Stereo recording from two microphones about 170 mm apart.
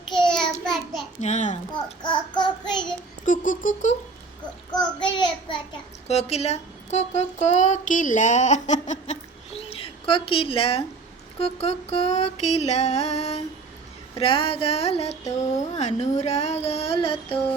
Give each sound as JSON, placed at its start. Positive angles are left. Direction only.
{"t": 0.3, "sound": "child singing", "side_deg": 5}
{"t": 1.2, "sound": "a sound", "side_deg": 45}
{"t": 2.0, "sound": "child singing", "side_deg": 25}
{"t": 3.2, "sound": "a sound", "side_deg": 50}
{"t": 4.7, "sound": "child singing", "side_deg": 25}
{"t": 6.1, "sound": "speech", "side_deg": 40}
{"t": 11.3, "sound": "music", "side_deg": 35}